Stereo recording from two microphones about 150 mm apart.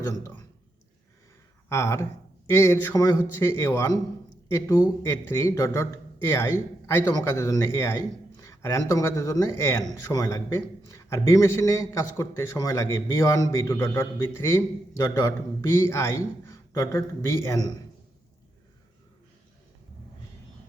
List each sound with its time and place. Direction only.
1.7 s a man's voice: 20° left (ahead or behind)